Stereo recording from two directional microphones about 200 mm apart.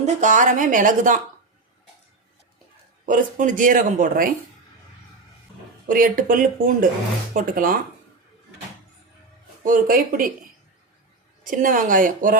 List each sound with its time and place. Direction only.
0.0 s speech: 40° right (ahead or behind)
3.1 s speech: 40° right (ahead or behind)
5.9 s speech: 45° right (ahead or behind)
9.6 s speech: 45° right (ahead or behind)
11.4 s speech: 40° right (ahead or behind)